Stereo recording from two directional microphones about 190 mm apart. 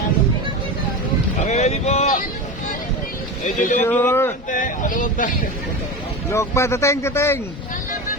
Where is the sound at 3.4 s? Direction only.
45° left (ahead or behind).